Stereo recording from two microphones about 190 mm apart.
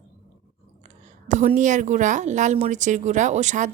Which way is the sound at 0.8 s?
40° right (ahead or behind).